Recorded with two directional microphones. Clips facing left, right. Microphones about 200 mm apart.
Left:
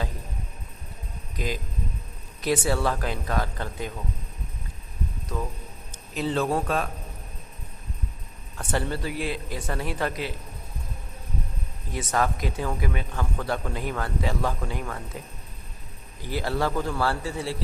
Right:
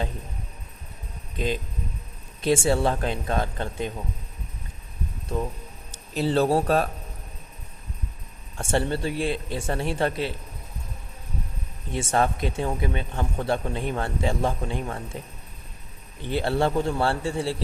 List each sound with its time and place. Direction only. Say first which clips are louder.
1.4 s a man's voice: right 3 dB; 25° right (ahead or behind)
6.1 s a man's voice: right 4 dB; 35° right (ahead or behind)
8.5 s a man's voice: right 3 dB; 25° right (ahead or behind)
11.9 s a man's voice: right 2 dB; 25° right (ahead or behind)
16.2 s a man's voice: right 3 dB; 25° right (ahead or behind)